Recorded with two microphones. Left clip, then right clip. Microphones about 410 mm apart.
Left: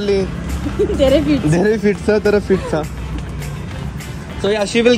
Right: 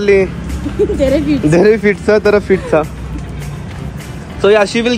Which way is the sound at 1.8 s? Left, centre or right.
Centre.